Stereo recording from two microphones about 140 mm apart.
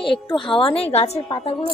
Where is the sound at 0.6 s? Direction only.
40° left (ahead or behind).